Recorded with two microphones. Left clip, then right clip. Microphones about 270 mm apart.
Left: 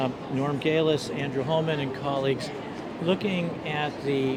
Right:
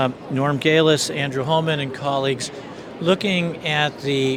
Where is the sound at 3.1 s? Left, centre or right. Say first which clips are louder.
Right 8 dB; right.